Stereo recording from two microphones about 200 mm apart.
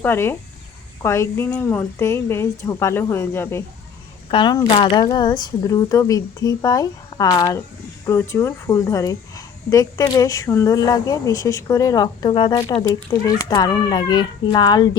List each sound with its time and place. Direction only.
0.0 s a woman's voice: 10° left (ahead or behind)
4.3 s a woman's voice: 25° left (ahead or behind)